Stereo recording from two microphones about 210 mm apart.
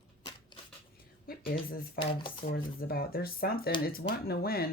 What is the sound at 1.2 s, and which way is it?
Speech, 45° left (ahead or behind).